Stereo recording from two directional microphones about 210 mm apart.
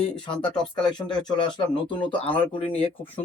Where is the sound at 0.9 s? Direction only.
20° left (ahead or behind).